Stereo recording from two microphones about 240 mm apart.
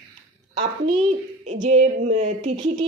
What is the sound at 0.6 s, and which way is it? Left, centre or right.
A woman's voice, right.